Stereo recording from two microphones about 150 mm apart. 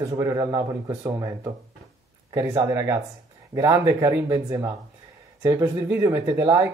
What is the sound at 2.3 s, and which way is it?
Speech, 20° right (ahead or behind).